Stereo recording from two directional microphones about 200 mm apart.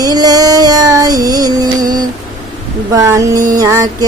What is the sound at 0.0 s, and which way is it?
Child singing, 20° right (ahead or behind).